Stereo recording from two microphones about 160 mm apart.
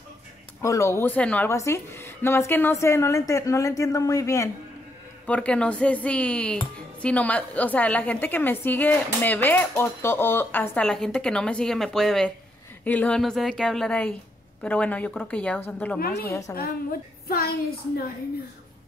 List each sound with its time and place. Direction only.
0.6 s speech: 15° left (ahead or behind)
5.2 s a woman's voice: 5° left (ahead or behind)
16.0 s a woman's voice: 80° left
16.3 s a woman's voice: 20° left (ahead or behind)
17.3 s a woman's voice: 70° left (ahead or behind)